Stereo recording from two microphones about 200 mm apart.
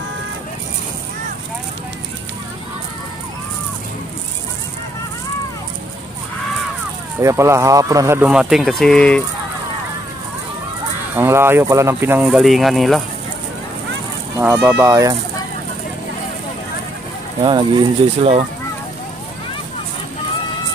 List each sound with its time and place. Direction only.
7.2 s speech: 15° right (ahead or behind); by 9.2 s 5° left (ahead or behind)
11.1 s speech: 10° right (ahead or behind)
14.4 s speech: 10° right (ahead or behind)
17.4 s speech: 25° right (ahead or behind)